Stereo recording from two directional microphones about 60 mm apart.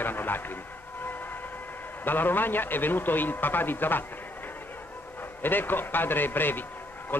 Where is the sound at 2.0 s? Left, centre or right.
Left.